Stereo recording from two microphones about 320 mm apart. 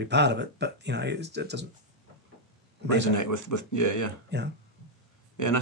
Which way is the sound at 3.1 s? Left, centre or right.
Left.